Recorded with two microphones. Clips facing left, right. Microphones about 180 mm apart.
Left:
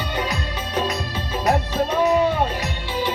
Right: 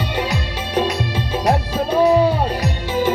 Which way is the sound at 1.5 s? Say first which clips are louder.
Right 1 dB; 30° right (ahead or behind).